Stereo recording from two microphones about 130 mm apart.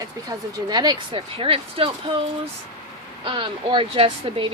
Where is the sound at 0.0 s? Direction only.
30° right (ahead or behind).